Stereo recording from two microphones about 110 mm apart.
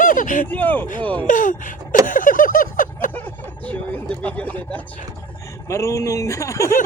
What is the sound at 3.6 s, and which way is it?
Speech, 15° left (ahead or behind).